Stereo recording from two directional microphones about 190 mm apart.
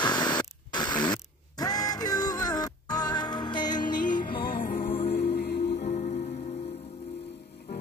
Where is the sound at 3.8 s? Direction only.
45° left (ahead or behind).